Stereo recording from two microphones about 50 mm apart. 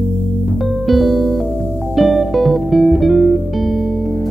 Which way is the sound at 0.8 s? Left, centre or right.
Centre.